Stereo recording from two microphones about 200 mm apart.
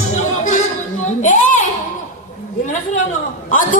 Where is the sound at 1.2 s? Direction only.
40° left (ahead or behind).